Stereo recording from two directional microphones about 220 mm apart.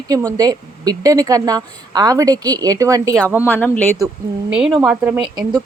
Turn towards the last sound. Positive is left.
turn(degrees=-20)  # may be behind; listen again after turning